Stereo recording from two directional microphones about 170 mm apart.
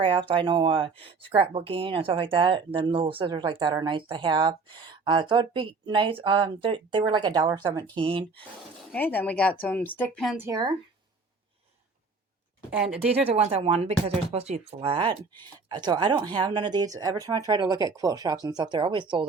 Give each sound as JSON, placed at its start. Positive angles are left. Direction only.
{"t": 0.0, "sound": "speech", "side_deg": -30}
{"t": 8.9, "sound": "speech", "side_deg": 10}
{"t": 10.3, "sound": "speech", "side_deg": -20}
{"t": 13.2, "sound": "speech", "side_deg": -40}